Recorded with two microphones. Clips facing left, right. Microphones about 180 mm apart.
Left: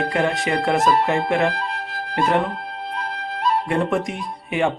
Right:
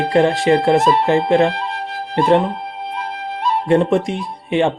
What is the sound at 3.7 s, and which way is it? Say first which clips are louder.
Speech: right 7 dB; 30° right (ahead or behind).